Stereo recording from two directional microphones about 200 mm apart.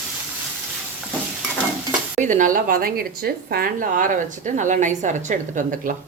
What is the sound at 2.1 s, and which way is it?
Speech, 40° right (ahead or behind).